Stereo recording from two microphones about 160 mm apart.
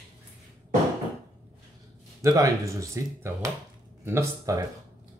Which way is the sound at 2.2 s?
20° right (ahead or behind).